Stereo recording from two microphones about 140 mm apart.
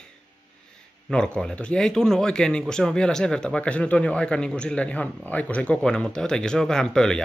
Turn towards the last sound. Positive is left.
turn(degrees=5)  # may be behind; listen again after turning